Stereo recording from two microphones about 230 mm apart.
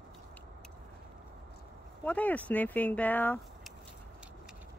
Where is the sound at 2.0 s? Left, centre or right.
Centre.